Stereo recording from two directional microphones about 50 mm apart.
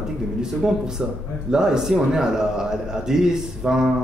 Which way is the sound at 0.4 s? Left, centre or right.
Centre.